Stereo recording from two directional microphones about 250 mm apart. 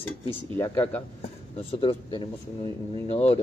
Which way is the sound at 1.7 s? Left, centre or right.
Left.